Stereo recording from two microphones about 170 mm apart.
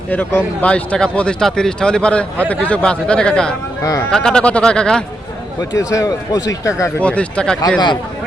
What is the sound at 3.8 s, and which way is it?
Speech, 20° left (ahead or behind).